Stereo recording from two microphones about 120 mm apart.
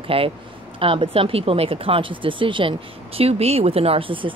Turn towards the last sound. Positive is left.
turn(degrees=-45)  # may be behind; listen again after turning